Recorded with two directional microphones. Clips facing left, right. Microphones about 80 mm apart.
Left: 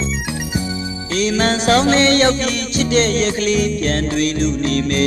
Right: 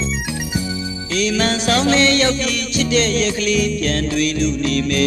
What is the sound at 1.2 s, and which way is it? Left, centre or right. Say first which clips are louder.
Music: left 2 dB; left.